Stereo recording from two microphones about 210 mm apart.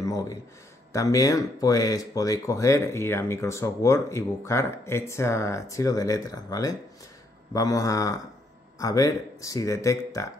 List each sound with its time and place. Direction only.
0.0 s speech: 15° left (ahead or behind)